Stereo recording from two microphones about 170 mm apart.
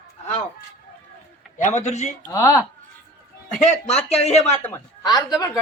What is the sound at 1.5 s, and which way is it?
Speech, 45° left (ahead or behind).